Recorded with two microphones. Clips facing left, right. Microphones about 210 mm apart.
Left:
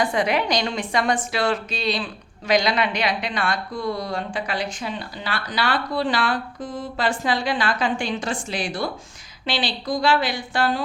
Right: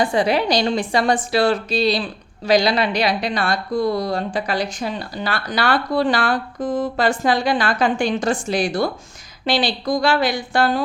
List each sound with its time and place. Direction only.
0.0 s a woman's voice: 30° right (ahead or behind)